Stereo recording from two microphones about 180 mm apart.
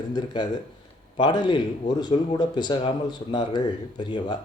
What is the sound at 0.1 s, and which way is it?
Speech, 25° left (ahead or behind).